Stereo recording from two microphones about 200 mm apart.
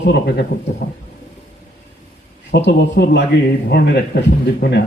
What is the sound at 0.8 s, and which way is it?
Speech, 45° left (ahead or behind).